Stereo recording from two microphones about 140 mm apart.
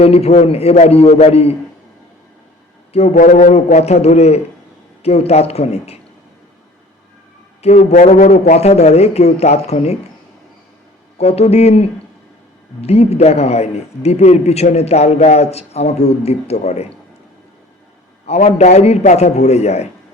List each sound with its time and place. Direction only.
0.0 s a man's voice: 45° left (ahead or behind)
3.2 s a man's voice: 65° left (ahead or behind); by 6.0 s 50° left (ahead or behind)
7.6 s a man's voice: 50° left (ahead or behind)
11.2 s a man's voice: 50° left (ahead or behind)
18.3 s a man's voice: 50° left (ahead or behind)